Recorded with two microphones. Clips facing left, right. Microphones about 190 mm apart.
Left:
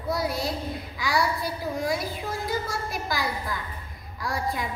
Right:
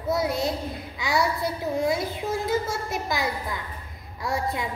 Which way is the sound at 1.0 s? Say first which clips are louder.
Right 2 dB; 25° right (ahead or behind).